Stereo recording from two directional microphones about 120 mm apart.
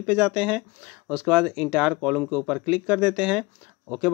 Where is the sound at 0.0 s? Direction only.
10° right (ahead or behind).